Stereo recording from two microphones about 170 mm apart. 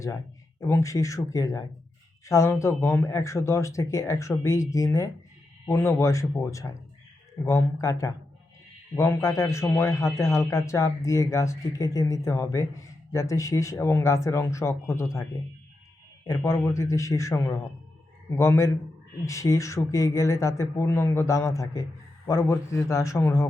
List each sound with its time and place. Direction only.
0.7 s speech: 15° left (ahead or behind)
16.2 s speech: 15° left (ahead or behind)